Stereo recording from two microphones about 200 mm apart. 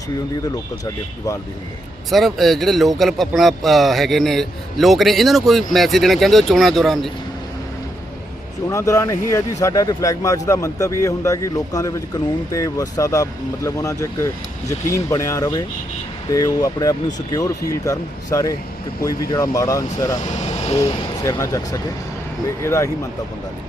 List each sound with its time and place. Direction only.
2.0 s a man's voice: centre (ahead or behind)
8.7 s speech: 15° left (ahead or behind)
20.1 s speech: 35° left (ahead or behind)
21.2 s speech: 15° left (ahead or behind)